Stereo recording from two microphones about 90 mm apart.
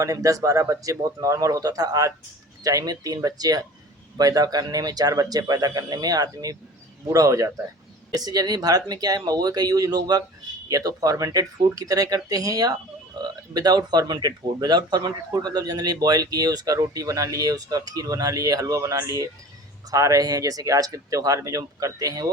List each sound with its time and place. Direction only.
0.0 s speech: 40° right (ahead or behind)
13.2 s a sound: 55° right (ahead or behind)
13.5 s speech: 50° right (ahead or behind)